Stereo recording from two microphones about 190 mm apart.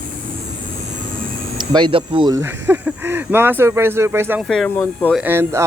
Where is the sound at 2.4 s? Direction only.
10° right (ahead or behind).